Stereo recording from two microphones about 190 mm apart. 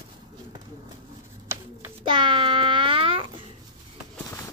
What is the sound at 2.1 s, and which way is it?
Babbling, 25° right (ahead or behind).